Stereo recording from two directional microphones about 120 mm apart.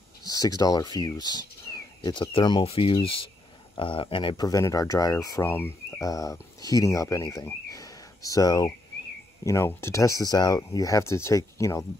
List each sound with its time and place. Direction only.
0.2 s speech: 30° left (ahead or behind)
4.5 s speech: 30° left (ahead or behind)
5.5 s speech: 20° left (ahead or behind)
6.0 s speech: 30° left (ahead or behind)